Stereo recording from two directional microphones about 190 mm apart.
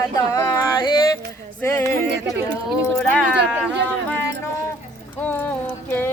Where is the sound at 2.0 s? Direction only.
65° right (ahead or behind).